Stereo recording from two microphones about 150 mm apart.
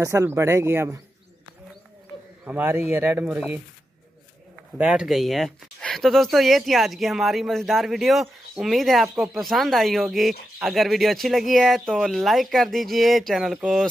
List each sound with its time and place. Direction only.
0.0 s speech: 20° right (ahead or behind)
2.4 s speech: 10° right (ahead or behind)
4.7 s speech: 5° right (ahead or behind)